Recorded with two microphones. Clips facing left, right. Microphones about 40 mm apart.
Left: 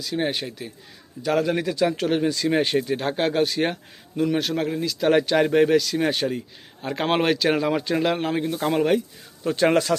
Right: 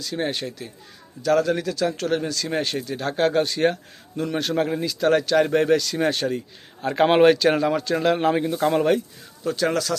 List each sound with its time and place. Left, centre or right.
0.0 s speech: centre
3.2 s speech: centre
5.0 s speech: centre
5.5 s speech: centre
7.8 s speech: centre
8.0 s speech: centre
9.4 s speech: left